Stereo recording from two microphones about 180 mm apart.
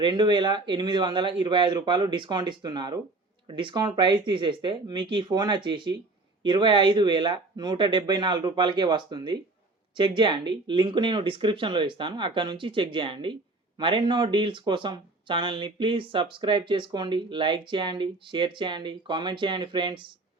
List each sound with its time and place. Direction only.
0.0 s speech: 25° right (ahead or behind)